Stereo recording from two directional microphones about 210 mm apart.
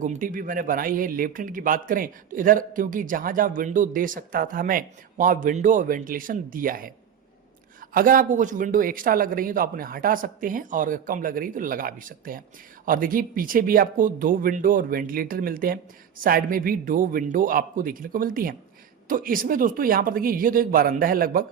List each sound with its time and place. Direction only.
0.0 s speech: 40° right (ahead or behind)